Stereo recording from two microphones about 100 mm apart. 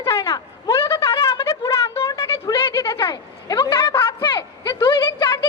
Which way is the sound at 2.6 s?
25° left (ahead or behind).